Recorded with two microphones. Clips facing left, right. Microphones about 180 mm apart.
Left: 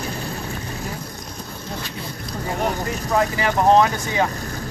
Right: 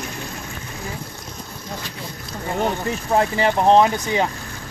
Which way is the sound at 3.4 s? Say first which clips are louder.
Right 1 dB; 30° right (ahead or behind).